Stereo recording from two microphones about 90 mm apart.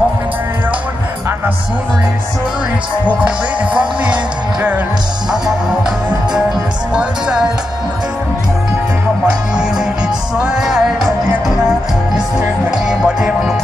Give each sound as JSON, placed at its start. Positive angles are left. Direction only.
{"t": 4.0, "sound": "speech", "side_deg": -15}
{"t": 6.9, "sound": "speech", "side_deg": -10}
{"t": 9.2, "sound": "speech", "side_deg": -10}
{"t": 10.3, "sound": "music", "side_deg": -10}
{"t": 12.7, "sound": "music", "side_deg": -5}